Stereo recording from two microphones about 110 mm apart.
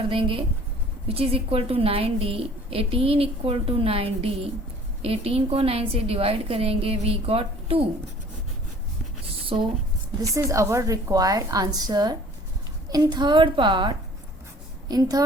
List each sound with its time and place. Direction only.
0.1 s a woman's voice: 50° right (ahead or behind)
9.5 s a woman's voice: 55° right (ahead or behind)
10.2 s a woman's voice: 30° right (ahead or behind)